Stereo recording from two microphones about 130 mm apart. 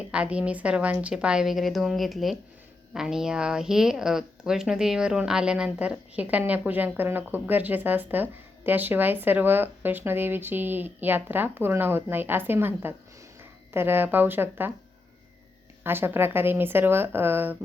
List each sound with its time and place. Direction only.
0.1 s speech: 10° right (ahead or behind)
15.8 s speech: 15° right (ahead or behind)